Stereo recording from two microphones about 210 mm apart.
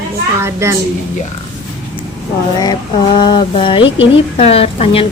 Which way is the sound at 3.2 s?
20° left (ahead or behind).